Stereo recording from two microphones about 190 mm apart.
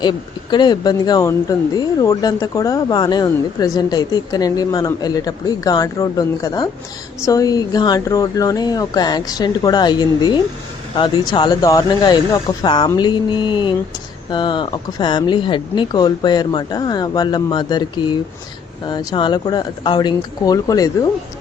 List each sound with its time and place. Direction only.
0.0 s speech: 25° left (ahead or behind)